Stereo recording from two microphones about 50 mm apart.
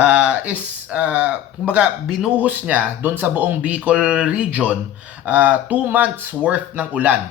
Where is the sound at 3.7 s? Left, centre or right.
Right.